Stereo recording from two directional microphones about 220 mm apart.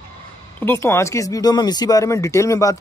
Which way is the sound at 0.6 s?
10° left (ahead or behind).